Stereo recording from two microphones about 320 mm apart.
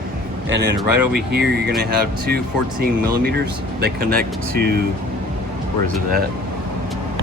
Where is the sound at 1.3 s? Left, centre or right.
Right.